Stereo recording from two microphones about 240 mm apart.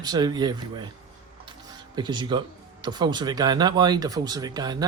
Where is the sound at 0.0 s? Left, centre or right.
Centre.